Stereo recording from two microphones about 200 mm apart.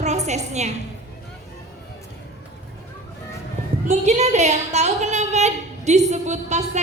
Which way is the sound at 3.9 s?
35° right (ahead or behind).